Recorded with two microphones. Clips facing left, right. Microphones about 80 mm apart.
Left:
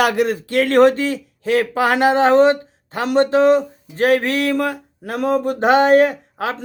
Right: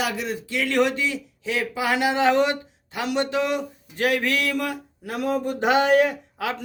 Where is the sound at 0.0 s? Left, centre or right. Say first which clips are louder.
Left 10 dB; left.